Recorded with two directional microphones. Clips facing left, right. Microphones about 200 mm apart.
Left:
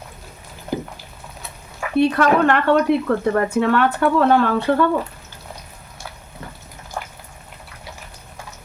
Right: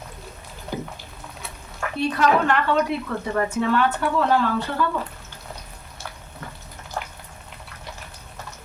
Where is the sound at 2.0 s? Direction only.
60° left (ahead or behind).